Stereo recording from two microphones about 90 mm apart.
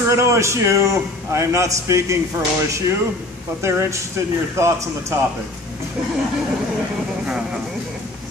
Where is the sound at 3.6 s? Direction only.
30° right (ahead or behind).